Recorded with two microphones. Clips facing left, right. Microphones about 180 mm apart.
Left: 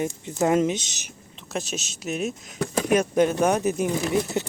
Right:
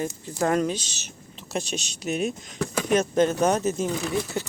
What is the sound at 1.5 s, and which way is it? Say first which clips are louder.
Speech: right 1 dB; centre (ahead or behind).